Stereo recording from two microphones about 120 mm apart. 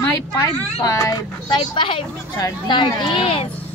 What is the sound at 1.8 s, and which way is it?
Speech, 45° left (ahead or behind).